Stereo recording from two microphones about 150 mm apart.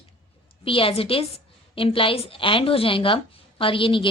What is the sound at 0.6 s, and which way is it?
A woman's voice, 35° left (ahead or behind).